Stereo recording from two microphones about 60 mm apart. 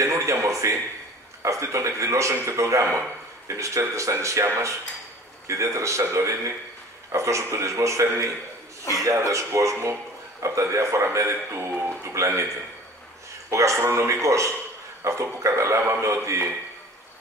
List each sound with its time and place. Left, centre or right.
0.0 s a man's voice: right
13.5 s a man's voice: right